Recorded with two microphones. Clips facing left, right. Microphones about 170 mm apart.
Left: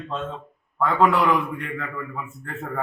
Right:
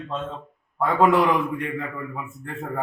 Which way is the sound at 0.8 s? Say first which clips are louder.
Right 1 dB; 15° right (ahead or behind).